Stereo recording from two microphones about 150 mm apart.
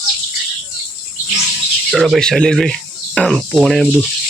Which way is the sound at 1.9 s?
Centre (ahead or behind).